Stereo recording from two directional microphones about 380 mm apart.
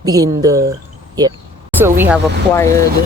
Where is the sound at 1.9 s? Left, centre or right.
Centre.